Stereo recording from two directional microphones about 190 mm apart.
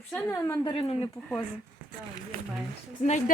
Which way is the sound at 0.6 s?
25° left (ahead or behind).